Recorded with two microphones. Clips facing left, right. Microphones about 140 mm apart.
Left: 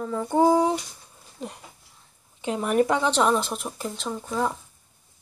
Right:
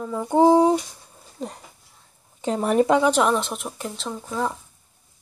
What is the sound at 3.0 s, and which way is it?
Speech, 5° right (ahead or behind).